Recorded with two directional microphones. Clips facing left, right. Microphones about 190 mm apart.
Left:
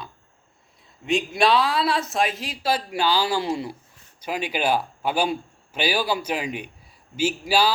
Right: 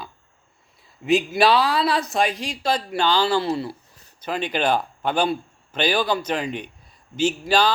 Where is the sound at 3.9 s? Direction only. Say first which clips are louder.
Right 1 dB; 35° right (ahead or behind).